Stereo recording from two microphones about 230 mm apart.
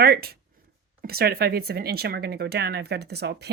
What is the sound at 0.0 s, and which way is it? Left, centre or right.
Speech, right.